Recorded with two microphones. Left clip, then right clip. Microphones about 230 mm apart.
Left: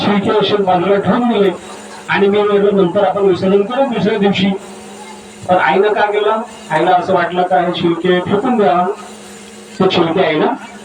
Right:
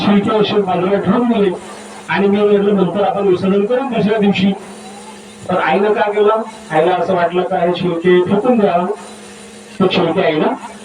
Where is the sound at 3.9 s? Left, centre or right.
Left.